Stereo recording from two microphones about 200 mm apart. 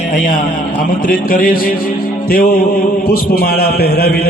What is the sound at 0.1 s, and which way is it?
Speech, 45° left (ahead or behind).